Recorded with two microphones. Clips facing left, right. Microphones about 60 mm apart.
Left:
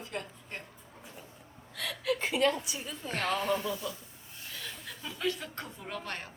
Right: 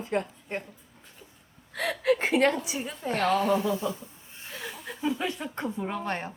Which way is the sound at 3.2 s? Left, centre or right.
Centre.